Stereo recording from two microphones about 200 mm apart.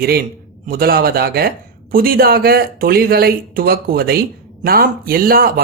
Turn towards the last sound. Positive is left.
turn(degrees=-50)  # may be behind; listen again after turning